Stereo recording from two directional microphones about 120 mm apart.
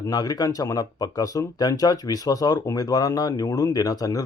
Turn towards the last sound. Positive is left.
turn(degrees=30)  # may be behind; listen again after turning